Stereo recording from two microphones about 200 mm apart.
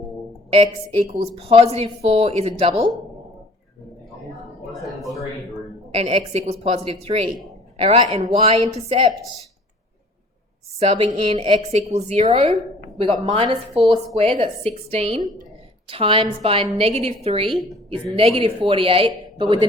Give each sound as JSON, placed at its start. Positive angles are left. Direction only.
{"t": 0.5, "sound": "speech", "side_deg": -30}
{"t": 4.7, "sound": "a sound", "side_deg": 0}
{"t": 5.9, "sound": "a woman's voice", "side_deg": -35}
{"t": 10.8, "sound": "a woman's voice", "side_deg": -30}